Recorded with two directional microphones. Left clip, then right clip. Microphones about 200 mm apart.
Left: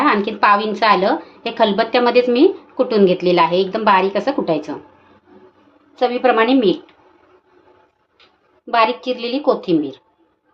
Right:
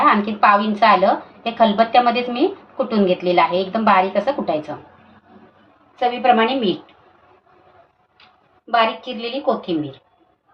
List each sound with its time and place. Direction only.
0.0 s a woman's voice: 55° left (ahead or behind)
6.0 s a woman's voice: 60° left (ahead or behind)
8.7 s a woman's voice: 60° left (ahead or behind)